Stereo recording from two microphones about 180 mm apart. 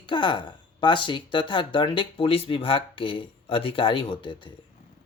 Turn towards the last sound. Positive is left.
turn(degrees=25)  # may be behind; listen again after turning